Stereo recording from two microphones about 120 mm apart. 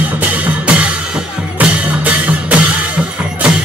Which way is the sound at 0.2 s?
10° right (ahead or behind).